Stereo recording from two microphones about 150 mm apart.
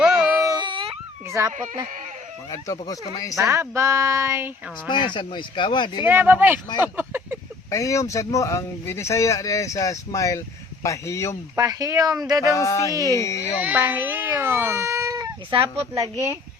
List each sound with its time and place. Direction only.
0.0 s baby cry: 5° right (ahead or behind)
0.3 s baby cry: 25° right (ahead or behind)
1.3 s speech: 20° right (ahead or behind)
2.5 s speech: 25° left (ahead or behind)
3.3 s a woman's voice: 20° right (ahead or behind)
4.9 s speech: 30° left (ahead or behind)
6.1 s speech: 15° right (ahead or behind)
6.8 s a sound: 15° right (ahead or behind)
7.7 s speech: 20° left (ahead or behind)
11.5 s a woman's voice: 25° right (ahead or behind)
12.5 s speech: 20° left (ahead or behind)
12.9 s a woman's voice: 20° right (ahead or behind)
13.1 s speech: 20° left (ahead or behind)
13.6 s a woman's voice: 10° right (ahead or behind)